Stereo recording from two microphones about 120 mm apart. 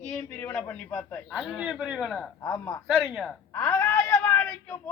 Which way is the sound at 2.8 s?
15° right (ahead or behind).